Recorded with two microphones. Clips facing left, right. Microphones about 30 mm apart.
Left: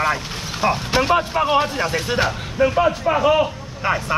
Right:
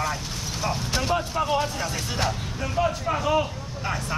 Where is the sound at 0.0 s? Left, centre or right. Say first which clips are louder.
Left 7 dB; left.